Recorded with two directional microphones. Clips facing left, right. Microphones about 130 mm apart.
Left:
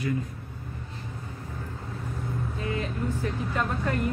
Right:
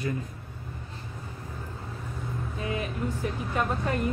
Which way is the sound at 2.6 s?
20° right (ahead or behind).